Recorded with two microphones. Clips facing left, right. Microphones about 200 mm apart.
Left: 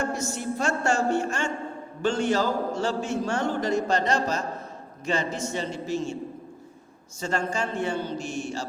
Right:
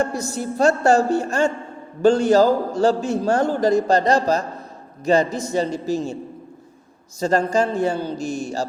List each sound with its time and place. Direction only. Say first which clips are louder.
0.0 s a man's voice: right 5 dB; 35° right (ahead or behind)
7.2 s a man's voice: right 9 dB; 35° right (ahead or behind)